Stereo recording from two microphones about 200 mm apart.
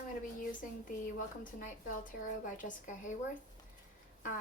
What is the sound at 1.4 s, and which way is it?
A woman's voice, 40° left (ahead or behind).